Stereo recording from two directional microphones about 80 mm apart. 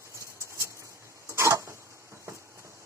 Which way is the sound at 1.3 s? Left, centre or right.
Right.